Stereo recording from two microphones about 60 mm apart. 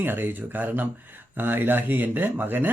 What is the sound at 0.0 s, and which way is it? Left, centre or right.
A man's voice, right.